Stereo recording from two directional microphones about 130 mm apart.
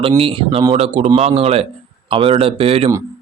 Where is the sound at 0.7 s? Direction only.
50° right (ahead or behind).